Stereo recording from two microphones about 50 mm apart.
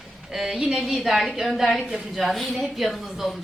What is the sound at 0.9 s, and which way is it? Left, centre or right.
A woman's voice, centre.